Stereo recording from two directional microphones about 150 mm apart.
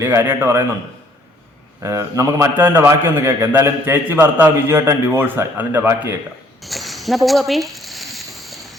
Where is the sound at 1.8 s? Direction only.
20° right (ahead or behind).